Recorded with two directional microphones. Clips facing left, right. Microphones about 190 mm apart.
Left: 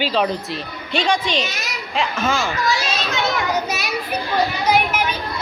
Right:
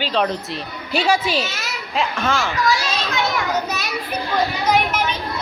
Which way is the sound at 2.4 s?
25° left (ahead or behind).